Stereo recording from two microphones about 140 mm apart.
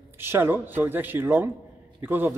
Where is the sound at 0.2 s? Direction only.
15° right (ahead or behind).